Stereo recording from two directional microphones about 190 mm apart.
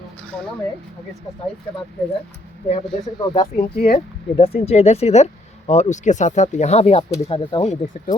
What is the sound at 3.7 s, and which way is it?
Speech, 50° left (ahead or behind).